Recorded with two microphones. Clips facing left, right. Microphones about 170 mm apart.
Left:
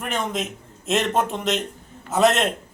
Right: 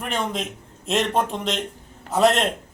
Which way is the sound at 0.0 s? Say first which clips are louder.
Even; 5° left (ahead or behind).